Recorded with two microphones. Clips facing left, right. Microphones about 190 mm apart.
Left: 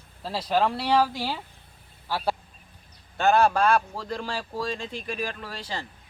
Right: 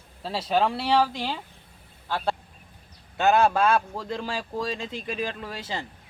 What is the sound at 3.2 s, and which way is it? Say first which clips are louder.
Speech: even; 20° right (ahead or behind).